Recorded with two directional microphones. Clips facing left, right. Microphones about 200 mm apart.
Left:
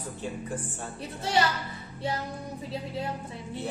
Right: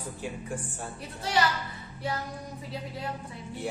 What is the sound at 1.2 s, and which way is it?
Speech, 25° left (ahead or behind).